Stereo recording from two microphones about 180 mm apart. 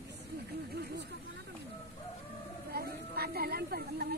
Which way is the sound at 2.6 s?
60° right (ahead or behind).